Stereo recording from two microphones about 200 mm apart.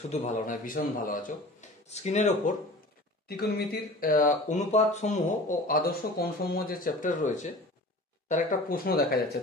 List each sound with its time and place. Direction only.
0.1 s speech: 40° left (ahead or behind)
3.3 s speech: 50° left (ahead or behind)